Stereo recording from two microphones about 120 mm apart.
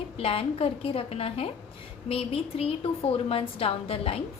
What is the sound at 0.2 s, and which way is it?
A woman's voice, 50° left (ahead or behind).